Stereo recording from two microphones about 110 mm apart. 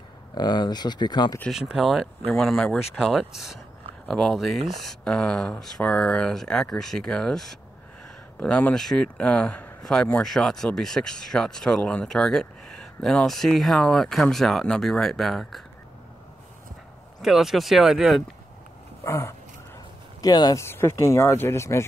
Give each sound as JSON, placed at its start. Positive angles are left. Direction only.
{"t": 0.3, "sound": "speech", "side_deg": 40}
{"t": 1.5, "sound": "speech", "side_deg": -5}
{"t": 17.2, "sound": "speech", "side_deg": -5}
{"t": 19.0, "sound": "speech", "side_deg": 25}
{"t": 20.2, "sound": "speech", "side_deg": 35}
{"t": 20.6, "sound": "speech", "side_deg": 25}